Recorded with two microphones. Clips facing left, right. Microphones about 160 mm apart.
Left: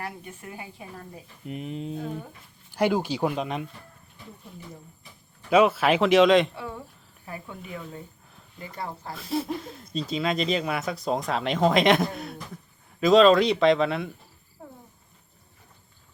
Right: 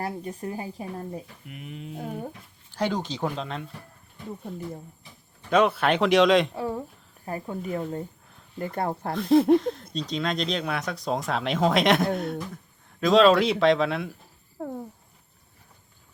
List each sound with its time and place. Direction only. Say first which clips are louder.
0.0 s speech: right 6 dB; 35° right (ahead or behind)
1.5 s speech: left 6 dB; 30° left (ahead or behind)
2.7 s speech: left 4 dB; 10° left (ahead or behind)
5.5 s speech: left 2 dB; 5° left (ahead or behind)
6.5 s speech: right 7 dB; 40° right (ahead or behind); by 9.1 s 55° right (ahead or behind)
9.1 s speech: right 12 dB; 5° left (ahead or behind)
14.6 s speech: right 11 dB; 60° right (ahead or behind)